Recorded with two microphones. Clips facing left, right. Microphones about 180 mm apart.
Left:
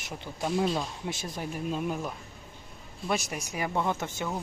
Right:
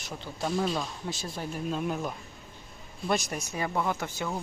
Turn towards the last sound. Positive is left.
turn(degrees=20)  # may be behind; listen again after turning